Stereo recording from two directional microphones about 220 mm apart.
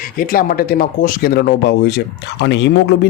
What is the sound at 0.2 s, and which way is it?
Speech, 40° left (ahead or behind).